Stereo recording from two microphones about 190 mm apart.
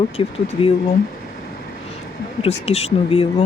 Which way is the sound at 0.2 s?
30° left (ahead or behind).